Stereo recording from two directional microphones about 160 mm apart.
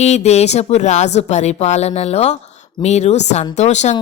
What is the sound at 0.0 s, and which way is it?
Speech, 45° left (ahead or behind).